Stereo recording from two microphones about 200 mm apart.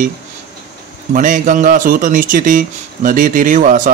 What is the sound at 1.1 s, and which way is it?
A man's voice, 40° right (ahead or behind).